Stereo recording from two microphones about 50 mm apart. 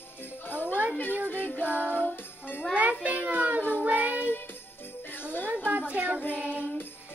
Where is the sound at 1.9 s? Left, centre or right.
Left.